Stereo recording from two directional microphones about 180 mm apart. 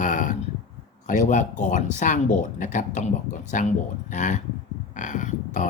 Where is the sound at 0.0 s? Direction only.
45° left (ahead or behind).